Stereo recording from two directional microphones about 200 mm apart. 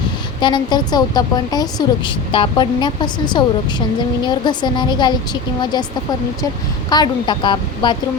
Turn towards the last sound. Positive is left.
turn(degrees=25)  # may be behind; listen again after turning